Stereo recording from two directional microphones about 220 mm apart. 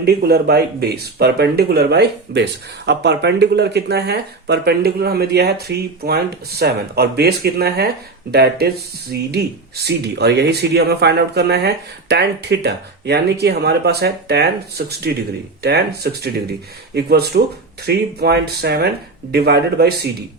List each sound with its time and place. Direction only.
0.0 s speech: 45° right (ahead or behind)